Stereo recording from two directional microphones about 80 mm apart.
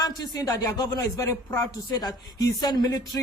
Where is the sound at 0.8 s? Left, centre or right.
Left.